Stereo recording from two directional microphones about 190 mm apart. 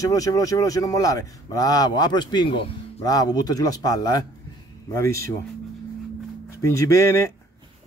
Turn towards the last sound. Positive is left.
turn(degrees=15)  # may be behind; listen again after turning